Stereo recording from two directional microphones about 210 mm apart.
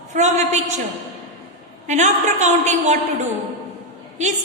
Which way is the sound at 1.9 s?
35° right (ahead or behind).